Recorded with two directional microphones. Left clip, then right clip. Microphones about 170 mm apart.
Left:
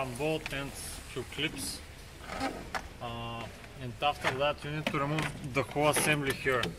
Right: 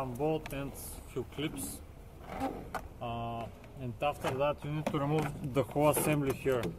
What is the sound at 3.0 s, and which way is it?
Speech, 25° right (ahead or behind).